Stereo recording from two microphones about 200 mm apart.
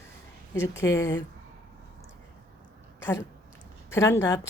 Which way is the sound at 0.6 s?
65° left (ahead or behind).